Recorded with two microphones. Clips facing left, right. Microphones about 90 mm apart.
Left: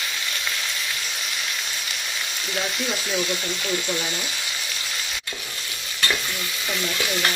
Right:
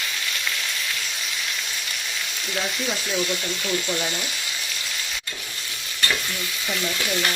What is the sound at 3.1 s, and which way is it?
Frying, 5° left (ahead or behind).